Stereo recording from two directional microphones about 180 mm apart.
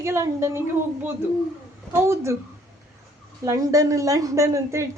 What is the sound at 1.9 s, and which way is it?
Speech, 15° right (ahead or behind).